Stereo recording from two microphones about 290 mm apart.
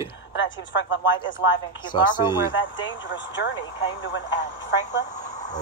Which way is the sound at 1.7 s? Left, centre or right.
Centre.